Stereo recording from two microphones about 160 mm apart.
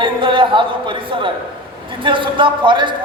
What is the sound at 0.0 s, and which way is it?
A woman's voice, 30° right (ahead or behind).